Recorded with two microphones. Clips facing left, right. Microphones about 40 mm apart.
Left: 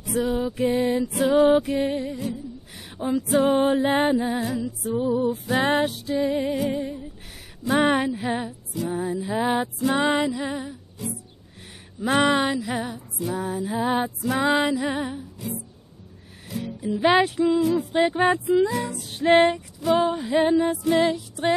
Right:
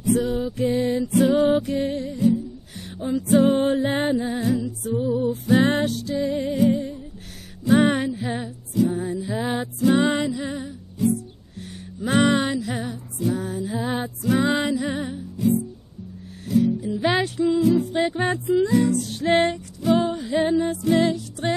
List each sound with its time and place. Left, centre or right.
0.0 s music: centre; by 0.9 s left
1.1 s music: centre
6.7 s a sound: centre
7.6 s music: centre
11.0 s music: centre
15.3 s music: centre